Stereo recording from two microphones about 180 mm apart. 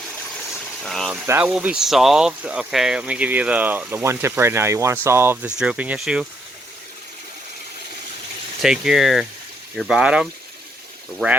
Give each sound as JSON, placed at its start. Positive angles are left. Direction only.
{"t": 0.8, "sound": "speech", "side_deg": 0}
{"t": 8.6, "sound": "speech", "side_deg": -5}